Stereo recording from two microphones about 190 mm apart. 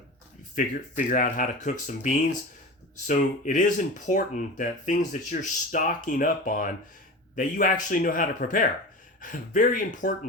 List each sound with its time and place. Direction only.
0.5 s speech: 45° left (ahead or behind)